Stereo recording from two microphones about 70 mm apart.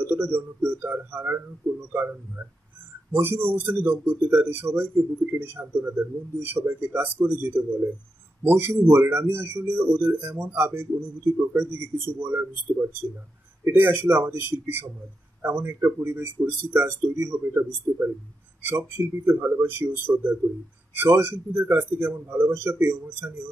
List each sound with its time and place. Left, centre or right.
0.0 s a man's voice: right
1.6 s speech: right
3.1 s a man's voice: right